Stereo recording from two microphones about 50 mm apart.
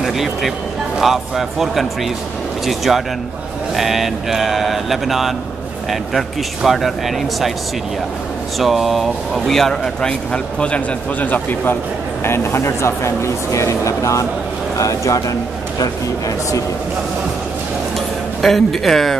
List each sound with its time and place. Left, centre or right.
0.0 s speech: centre
8.5 s speech: centre
11.1 s speech: left
12.3 s a man's voice: left
18.4 s speech: centre